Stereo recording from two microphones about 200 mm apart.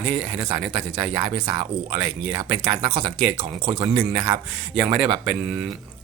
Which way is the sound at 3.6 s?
20° right (ahead or behind).